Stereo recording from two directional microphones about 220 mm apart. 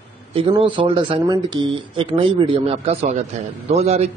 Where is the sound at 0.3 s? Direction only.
25° right (ahead or behind).